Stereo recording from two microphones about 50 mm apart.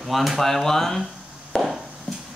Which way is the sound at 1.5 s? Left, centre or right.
Centre.